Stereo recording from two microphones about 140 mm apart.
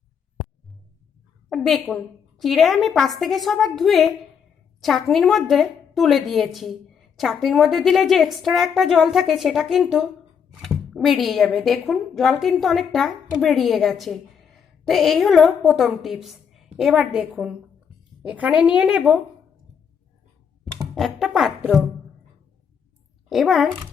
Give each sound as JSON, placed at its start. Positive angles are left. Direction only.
{"t": 1.5, "sound": "a sound", "side_deg": 0}
{"t": 2.4, "sound": "a woman's voice", "side_deg": 0}
{"t": 20.9, "sound": "speech", "side_deg": 0}
{"t": 23.3, "sound": "a woman's voice", "side_deg": 0}